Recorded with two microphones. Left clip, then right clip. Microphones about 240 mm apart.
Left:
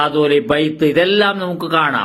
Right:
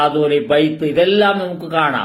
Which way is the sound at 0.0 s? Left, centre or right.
Left.